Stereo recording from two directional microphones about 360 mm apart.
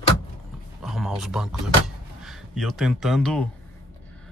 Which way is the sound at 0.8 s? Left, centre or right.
Centre.